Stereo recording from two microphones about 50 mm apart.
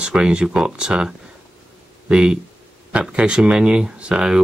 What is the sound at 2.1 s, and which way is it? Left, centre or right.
Speech, centre.